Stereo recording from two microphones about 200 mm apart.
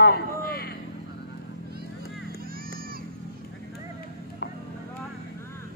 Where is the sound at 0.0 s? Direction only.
50° left (ahead or behind).